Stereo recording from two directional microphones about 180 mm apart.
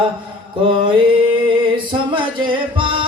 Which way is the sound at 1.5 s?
30° right (ahead or behind).